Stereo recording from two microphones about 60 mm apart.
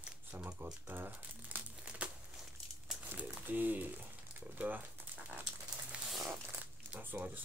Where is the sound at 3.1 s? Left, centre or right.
Right.